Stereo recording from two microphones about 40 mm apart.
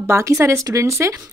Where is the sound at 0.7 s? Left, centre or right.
Right.